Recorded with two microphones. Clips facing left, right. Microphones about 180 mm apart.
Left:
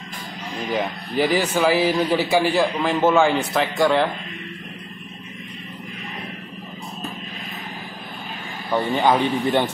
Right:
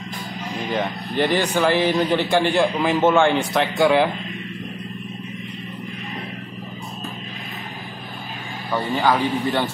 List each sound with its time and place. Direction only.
0.7 s a man's voice: 5° left (ahead or behind)
9.0 s a man's voice: 20° left (ahead or behind)